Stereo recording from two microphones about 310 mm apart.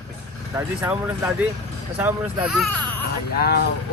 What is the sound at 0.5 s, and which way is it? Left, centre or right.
Speech, centre.